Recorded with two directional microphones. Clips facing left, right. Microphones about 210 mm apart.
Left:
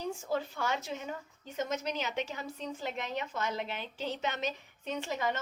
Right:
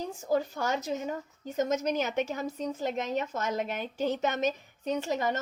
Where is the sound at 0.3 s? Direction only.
40° right (ahead or behind).